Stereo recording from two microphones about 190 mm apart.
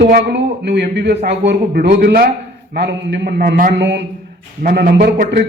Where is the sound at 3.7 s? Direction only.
70° right (ahead or behind).